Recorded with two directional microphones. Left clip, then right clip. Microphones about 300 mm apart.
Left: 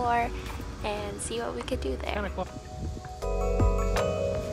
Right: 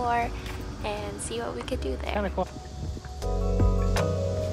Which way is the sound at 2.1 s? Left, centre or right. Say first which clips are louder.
Right 4 dB; right.